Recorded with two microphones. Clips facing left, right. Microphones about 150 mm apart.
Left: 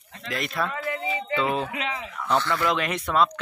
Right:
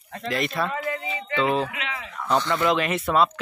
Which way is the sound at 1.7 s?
35° left (ahead or behind).